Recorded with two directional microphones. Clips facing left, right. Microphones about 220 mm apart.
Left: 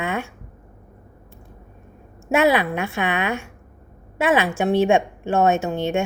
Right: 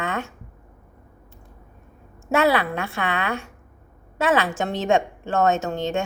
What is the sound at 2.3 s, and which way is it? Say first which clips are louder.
A woman's voice: left 2 dB; 15° left (ahead or behind).